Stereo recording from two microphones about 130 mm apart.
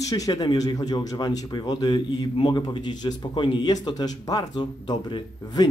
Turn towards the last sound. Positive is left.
turn(degrees=35)  # may be behind; listen again after turning